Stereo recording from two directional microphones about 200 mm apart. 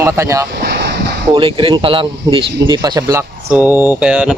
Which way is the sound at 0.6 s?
55° right (ahead or behind).